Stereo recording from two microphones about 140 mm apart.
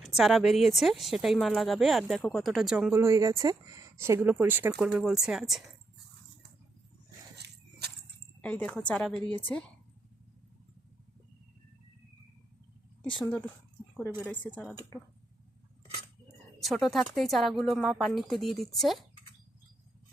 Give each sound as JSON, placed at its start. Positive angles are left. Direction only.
{"t": 0.0, "sound": "speech", "side_deg": 0}
{"t": 2.9, "sound": "speech", "side_deg": -20}
{"t": 8.4, "sound": "a woman's voice", "side_deg": 10}
{"t": 13.2, "sound": "a woman's voice", "side_deg": 10}
{"t": 14.9, "sound": "speech", "side_deg": 20}
{"t": 16.6, "sound": "speech", "side_deg": 0}